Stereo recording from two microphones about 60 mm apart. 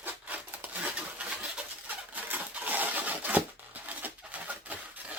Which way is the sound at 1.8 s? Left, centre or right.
Right.